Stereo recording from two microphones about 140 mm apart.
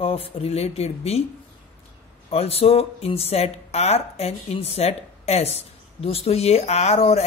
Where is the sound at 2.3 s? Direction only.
45° left (ahead or behind).